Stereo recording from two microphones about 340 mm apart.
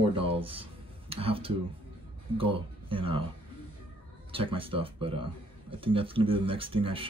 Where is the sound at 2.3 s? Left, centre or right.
Centre.